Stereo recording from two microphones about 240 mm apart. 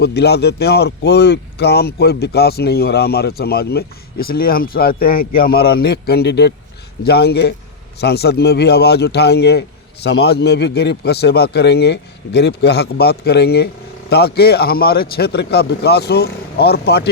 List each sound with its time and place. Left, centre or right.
0.0 s a man's voice: left